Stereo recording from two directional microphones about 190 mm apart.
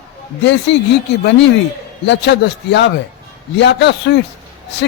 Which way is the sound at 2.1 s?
65° left (ahead or behind).